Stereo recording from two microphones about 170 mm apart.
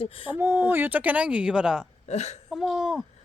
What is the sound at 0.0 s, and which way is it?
Speech, 30° left (ahead or behind).